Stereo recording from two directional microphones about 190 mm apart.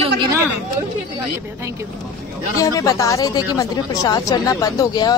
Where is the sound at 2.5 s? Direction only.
15° left (ahead or behind).